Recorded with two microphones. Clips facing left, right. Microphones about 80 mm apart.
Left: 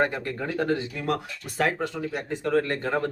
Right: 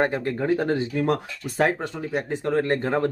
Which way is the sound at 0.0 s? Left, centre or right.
Right.